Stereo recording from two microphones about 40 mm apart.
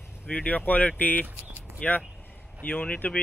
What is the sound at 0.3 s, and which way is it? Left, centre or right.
Speech, left.